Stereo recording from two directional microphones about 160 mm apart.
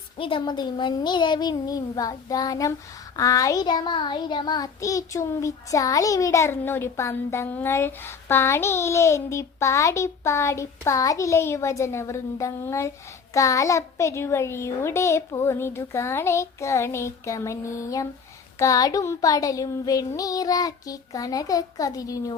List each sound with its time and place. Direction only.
0.2 s child singing: 35° left (ahead or behind); by 12.9 s 15° left (ahead or behind)
13.3 s a child's voice: 20° left (ahead or behind)
18.6 s child singing: 20° left (ahead or behind)